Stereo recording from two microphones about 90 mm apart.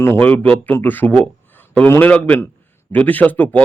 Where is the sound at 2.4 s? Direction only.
25° left (ahead or behind).